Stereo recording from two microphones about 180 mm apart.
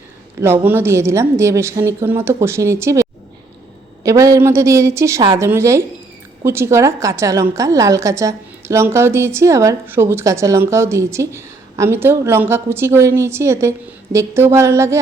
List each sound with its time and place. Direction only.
0.3 s a woman's voice: 15° right (ahead or behind)